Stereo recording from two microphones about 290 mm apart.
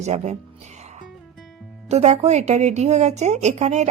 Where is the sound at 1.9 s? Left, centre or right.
Right.